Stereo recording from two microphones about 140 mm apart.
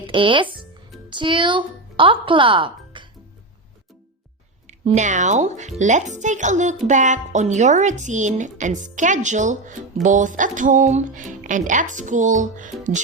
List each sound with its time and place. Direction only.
0.1 s speech: 35° right (ahead or behind)
4.6 s speech: 55° right (ahead or behind)